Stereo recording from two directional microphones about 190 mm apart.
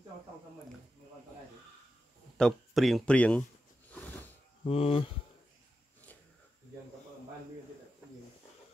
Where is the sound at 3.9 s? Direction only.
10° left (ahead or behind).